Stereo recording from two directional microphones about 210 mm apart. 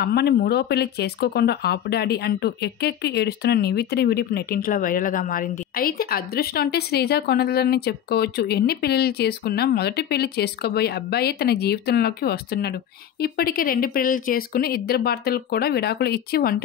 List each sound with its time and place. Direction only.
0.0 s speech: 50° left (ahead or behind)